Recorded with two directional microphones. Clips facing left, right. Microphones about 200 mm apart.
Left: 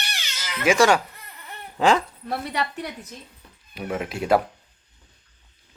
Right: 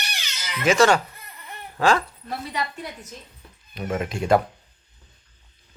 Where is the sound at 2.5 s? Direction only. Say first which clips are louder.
Left 2 dB; 70° left (ahead or behind).